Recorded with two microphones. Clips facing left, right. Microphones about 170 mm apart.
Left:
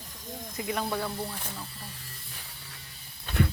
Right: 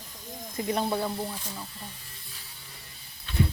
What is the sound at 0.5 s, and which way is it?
Speech, 30° right (ahead or behind).